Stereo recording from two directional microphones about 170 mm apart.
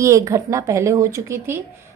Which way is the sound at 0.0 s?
20° right (ahead or behind).